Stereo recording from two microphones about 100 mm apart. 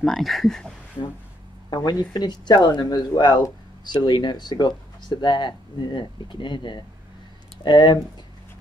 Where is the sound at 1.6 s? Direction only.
40° left (ahead or behind).